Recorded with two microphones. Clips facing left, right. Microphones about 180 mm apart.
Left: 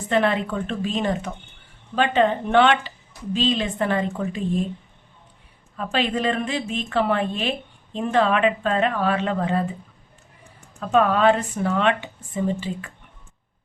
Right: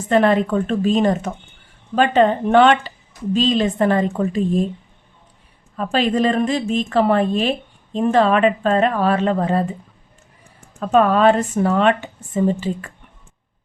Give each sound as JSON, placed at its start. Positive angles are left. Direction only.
{"t": 0.1, "sound": "speech", "side_deg": -45}
{"t": 5.7, "sound": "speech", "side_deg": -40}
{"t": 10.8, "sound": "speech", "side_deg": -40}